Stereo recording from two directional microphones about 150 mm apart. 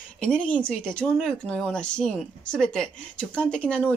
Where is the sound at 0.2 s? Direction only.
5° left (ahead or behind).